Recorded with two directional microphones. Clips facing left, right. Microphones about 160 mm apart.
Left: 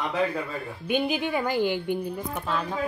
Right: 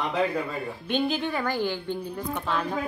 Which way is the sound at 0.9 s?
10° left (ahead or behind).